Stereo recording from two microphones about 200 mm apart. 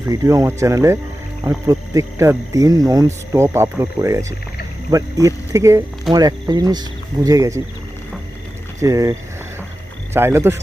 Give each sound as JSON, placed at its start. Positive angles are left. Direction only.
{"t": 0.1, "sound": "speech", "side_deg": -15}
{"t": 8.8, "sound": "speech", "side_deg": -15}